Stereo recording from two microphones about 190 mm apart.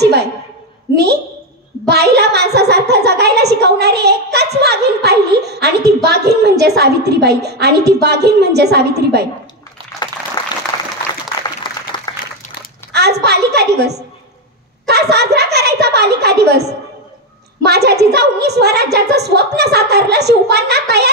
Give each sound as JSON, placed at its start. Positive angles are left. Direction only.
{"t": 0.0, "sound": "a woman's voice", "side_deg": -60}
{"t": 1.9, "sound": "a woman's voice", "side_deg": -60}
{"t": 10.4, "sound": "applause", "side_deg": 25}
{"t": 12.9, "sound": "a woman's voice", "side_deg": -60}